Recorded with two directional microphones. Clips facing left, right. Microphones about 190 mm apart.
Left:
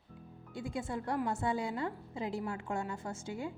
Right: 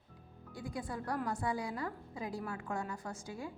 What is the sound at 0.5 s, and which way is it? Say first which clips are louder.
A woman's voice: left 3 dB; 25° left (ahead or behind).